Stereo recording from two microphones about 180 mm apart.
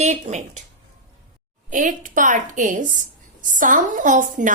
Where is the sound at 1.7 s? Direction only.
45° right (ahead or behind).